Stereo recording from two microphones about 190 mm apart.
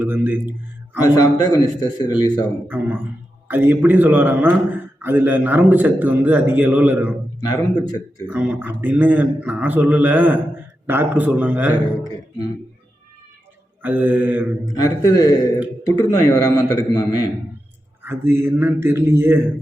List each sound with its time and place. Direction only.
0.0 s a man's voice: 10° right (ahead or behind)
0.9 s a man's voice: 20° left (ahead or behind)
2.6 s a man's voice: 10° right (ahead or behind)
7.4 s a man's voice: 20° left (ahead or behind)
8.3 s a man's voice: 10° right (ahead or behind)
13.8 s a man's voice: 10° right (ahead or behind)
14.6 s a man's voice: 20° left (ahead or behind)
18.0 s a man's voice: 10° right (ahead or behind)